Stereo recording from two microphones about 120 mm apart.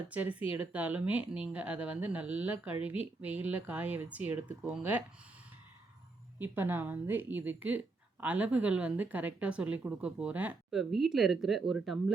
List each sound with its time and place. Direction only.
0.1 s speech: 10° right (ahead or behind)
6.4 s speech: 15° right (ahead or behind)
10.7 s speech: centre (ahead or behind)